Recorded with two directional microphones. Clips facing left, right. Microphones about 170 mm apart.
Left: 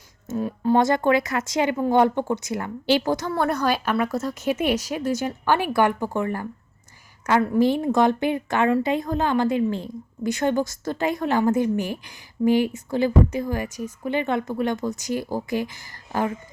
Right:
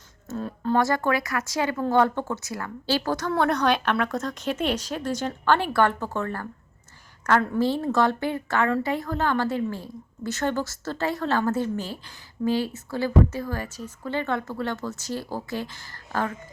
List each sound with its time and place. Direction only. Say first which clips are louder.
0.3 s a woman's voice: left 5 dB; 15° left (ahead or behind)